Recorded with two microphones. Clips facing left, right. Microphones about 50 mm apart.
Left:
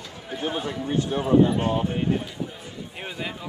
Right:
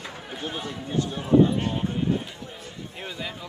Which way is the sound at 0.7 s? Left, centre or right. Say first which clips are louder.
Even; left.